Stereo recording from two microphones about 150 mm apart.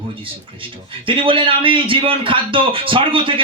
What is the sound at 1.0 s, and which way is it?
A man's voice, 35° right (ahead or behind).